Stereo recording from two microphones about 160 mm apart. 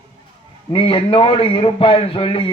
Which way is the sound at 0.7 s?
35° left (ahead or behind).